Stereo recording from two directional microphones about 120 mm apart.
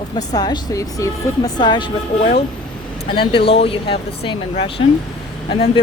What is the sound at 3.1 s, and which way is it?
Speech, 45° left (ahead or behind).